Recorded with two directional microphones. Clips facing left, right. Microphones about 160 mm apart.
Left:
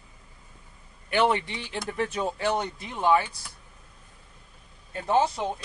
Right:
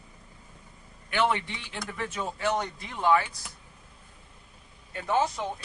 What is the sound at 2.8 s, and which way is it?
Speech, 20° left (ahead or behind).